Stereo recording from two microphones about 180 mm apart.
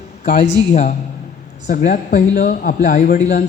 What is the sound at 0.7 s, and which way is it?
Speech, 45° left (ahead or behind).